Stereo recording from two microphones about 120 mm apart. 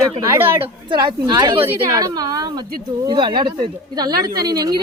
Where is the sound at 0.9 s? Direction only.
40° right (ahead or behind).